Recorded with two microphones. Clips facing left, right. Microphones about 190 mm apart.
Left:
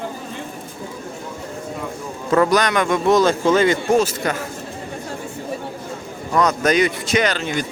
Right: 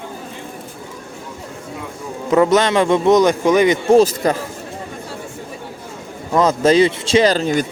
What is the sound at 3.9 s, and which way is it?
Speech, 30° right (ahead or behind).